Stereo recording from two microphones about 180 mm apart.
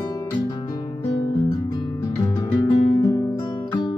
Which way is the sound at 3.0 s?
20° left (ahead or behind).